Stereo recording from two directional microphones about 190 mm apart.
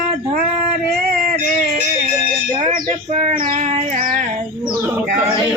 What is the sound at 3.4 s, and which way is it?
Child singing, 40° right (ahead or behind).